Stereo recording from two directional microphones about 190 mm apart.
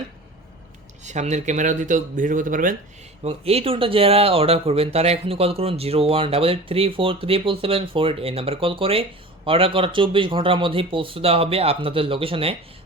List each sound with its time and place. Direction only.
1.0 s speech: 40° right (ahead or behind)
3.2 s speech: 30° right (ahead or behind)